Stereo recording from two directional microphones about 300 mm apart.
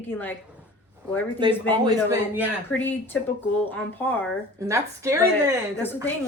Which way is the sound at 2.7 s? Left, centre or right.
Centre.